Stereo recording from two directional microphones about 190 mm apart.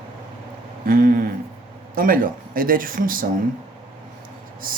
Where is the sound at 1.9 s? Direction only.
50° right (ahead or behind).